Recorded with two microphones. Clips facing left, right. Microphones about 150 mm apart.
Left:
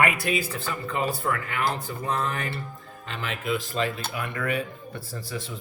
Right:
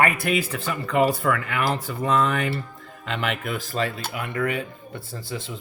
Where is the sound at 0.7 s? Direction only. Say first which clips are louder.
Right 8 dB; 90° right.